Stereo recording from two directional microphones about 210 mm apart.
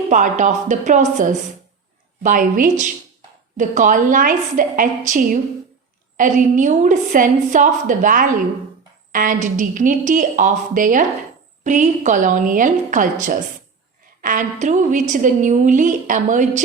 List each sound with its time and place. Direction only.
0.1 s a woman's voice: 35° right (ahead or behind)